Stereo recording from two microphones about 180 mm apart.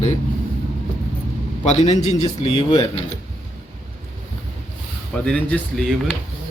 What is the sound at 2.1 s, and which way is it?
Speech, 25° left (ahead or behind).